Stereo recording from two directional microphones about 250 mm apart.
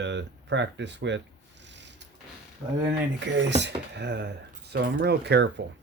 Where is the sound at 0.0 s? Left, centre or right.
Right.